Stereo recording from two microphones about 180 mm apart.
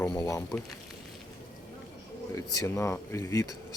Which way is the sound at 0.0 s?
20° left (ahead or behind).